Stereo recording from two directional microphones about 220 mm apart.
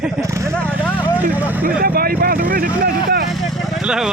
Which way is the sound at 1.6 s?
40° right (ahead or behind).